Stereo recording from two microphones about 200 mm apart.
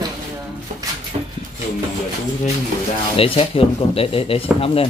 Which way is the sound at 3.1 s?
25° left (ahead or behind).